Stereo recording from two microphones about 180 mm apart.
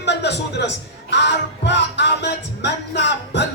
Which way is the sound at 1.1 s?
75° left (ahead or behind).